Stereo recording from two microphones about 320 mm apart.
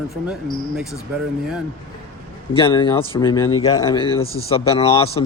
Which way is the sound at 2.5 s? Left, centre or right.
Centre.